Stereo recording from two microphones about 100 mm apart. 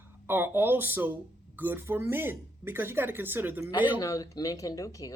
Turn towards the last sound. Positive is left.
turn(degrees=35)  # may be behind; listen again after turning